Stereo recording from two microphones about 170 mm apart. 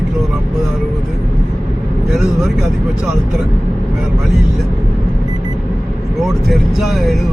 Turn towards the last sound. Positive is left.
turn(degrees=0)  # may be behind; listen again after turning